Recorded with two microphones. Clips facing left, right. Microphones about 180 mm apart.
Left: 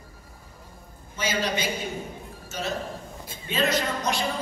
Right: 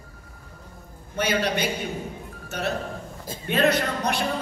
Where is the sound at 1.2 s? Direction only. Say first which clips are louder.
Right 3 dB; 60° right (ahead or behind).